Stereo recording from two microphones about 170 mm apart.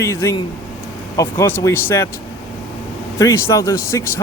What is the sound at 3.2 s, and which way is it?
Speech, 20° left (ahead or behind).